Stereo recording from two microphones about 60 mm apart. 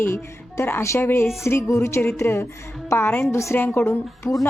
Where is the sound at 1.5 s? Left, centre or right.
Left.